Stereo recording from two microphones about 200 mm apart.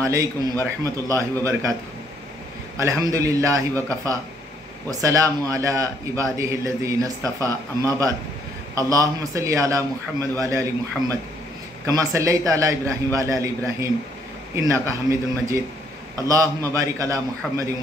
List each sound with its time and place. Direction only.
0.1 s a man's voice: 15° right (ahead or behind)
2.8 s a man's voice: 15° right (ahead or behind)